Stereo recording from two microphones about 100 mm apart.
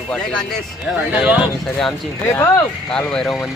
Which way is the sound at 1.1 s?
10° right (ahead or behind).